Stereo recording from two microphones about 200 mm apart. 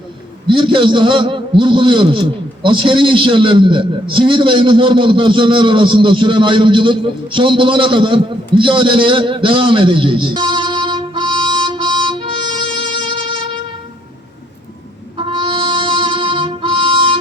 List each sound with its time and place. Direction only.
0.4 s a man's voice: 25° right (ahead or behind)
15.2 s music: 25° right (ahead or behind)